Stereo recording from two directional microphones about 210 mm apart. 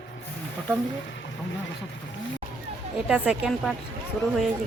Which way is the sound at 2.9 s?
5° right (ahead or behind).